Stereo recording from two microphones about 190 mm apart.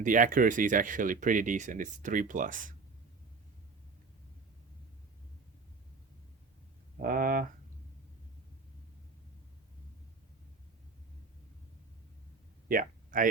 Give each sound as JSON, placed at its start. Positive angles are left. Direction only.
{"t": 0.0, "sound": "speech", "side_deg": -45}
{"t": 6.9, "sound": "speech", "side_deg": -50}
{"t": 12.6, "sound": "a sound", "side_deg": -45}